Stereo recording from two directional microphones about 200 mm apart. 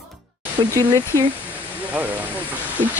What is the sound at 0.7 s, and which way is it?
Speech, 15° right (ahead or behind).